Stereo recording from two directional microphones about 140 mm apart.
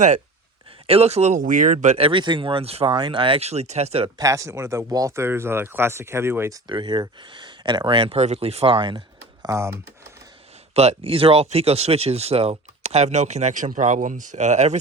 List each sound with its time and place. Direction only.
0.9 s speech: 45° right (ahead or behind); by 2.0 s 65° right (ahead or behind)
2.0 s speech: 40° right (ahead or behind)
4.2 s speech: 25° right (ahead or behind)
6.7 s speech: 35° right (ahead or behind)
10.8 s speech: 45° right (ahead or behind)